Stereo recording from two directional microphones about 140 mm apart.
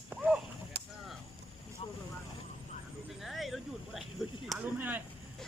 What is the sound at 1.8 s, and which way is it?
Vehicle, 45° left (ahead or behind).